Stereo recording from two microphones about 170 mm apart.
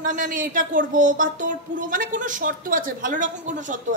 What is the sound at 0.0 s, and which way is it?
A woman's voice, 50° right (ahead or behind).